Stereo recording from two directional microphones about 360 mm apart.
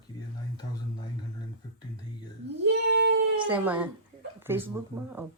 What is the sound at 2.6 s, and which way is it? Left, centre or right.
Child singing, right.